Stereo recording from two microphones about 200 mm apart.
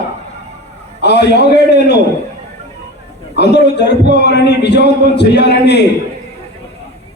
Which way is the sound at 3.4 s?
55° left (ahead or behind).